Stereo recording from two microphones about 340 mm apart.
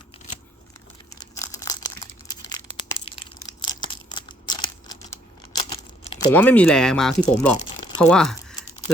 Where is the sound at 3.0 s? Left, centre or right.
Centre.